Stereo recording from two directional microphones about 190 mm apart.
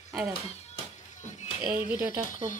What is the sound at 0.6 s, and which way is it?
Music, 40° left (ahead or behind).